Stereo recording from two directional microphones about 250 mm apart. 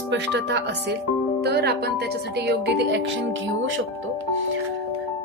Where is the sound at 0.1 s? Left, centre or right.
Right.